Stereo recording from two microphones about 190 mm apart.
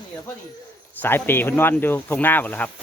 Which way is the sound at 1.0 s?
10° left (ahead or behind).